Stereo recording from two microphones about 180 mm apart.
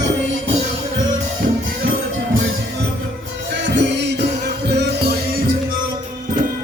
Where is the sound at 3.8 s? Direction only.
75° right (ahead or behind).